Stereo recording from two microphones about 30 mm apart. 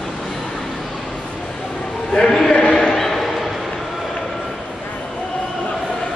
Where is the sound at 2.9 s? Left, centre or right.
Centre.